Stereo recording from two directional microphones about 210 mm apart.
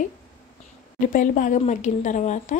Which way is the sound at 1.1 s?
40° left (ahead or behind).